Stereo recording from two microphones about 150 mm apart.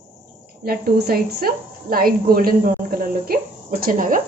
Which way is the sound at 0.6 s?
90° right.